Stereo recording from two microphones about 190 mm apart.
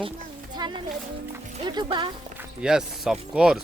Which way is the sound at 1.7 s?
20° right (ahead or behind).